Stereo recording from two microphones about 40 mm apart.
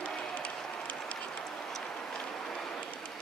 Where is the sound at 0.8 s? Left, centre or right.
Left.